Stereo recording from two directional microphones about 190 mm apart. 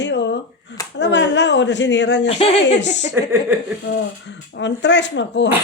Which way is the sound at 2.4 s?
30° left (ahead or behind).